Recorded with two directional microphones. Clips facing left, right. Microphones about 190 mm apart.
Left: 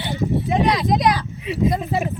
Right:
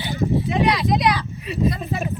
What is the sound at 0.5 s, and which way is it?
Speech, 45° left (ahead or behind).